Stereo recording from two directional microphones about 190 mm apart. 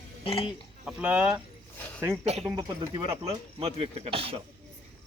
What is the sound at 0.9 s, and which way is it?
Speech, 5° right (ahead or behind).